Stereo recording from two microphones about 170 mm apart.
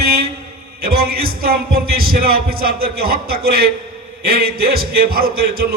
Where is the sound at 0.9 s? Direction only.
60° right (ahead or behind).